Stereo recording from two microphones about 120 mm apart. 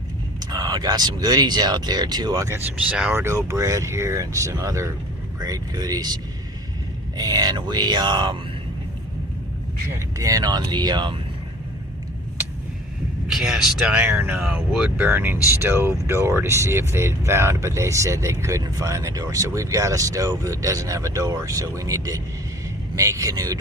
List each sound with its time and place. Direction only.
0.3 s speech: 35° right (ahead or behind)
2.5 s speech: 15° right (ahead or behind); by 6.1 s 30° right (ahead or behind)
7.2 s speech: 35° right (ahead or behind)
9.9 s speech: 30° right (ahead or behind)
13.2 s speech: 5° right (ahead or behind); by 23.6 s 30° right (ahead or behind)